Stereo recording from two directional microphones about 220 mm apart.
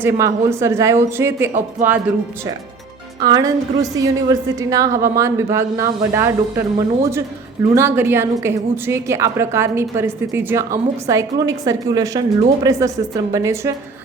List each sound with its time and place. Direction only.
0.0 s a woman's voice: 10° right (ahead or behind)
3.2 s a woman's voice: 15° right (ahead or behind)